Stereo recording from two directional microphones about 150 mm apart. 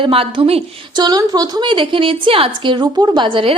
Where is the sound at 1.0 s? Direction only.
25° right (ahead or behind).